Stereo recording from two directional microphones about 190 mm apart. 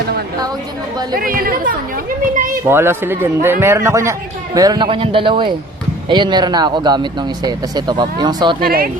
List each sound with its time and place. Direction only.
1.1 s speech: 50° right (ahead or behind)
2.6 s a man's voice: 10° right (ahead or behind)
8.6 s speech: 50° right (ahead or behind)